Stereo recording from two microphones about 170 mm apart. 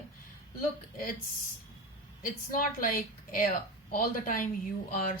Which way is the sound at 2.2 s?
55° left (ahead or behind).